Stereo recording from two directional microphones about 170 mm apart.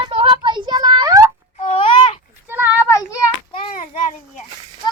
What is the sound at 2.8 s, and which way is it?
Child singing, 15° left (ahead or behind).